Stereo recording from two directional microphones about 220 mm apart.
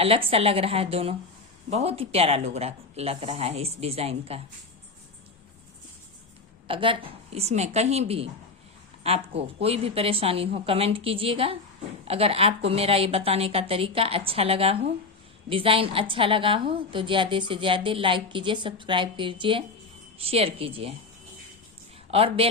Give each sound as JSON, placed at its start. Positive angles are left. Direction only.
{"t": 0.0, "sound": "a woman's voice", "side_deg": -25}
{"t": 6.7, "sound": "a woman's voice", "side_deg": -25}
{"t": 22.1, "sound": "a woman's voice", "side_deg": -25}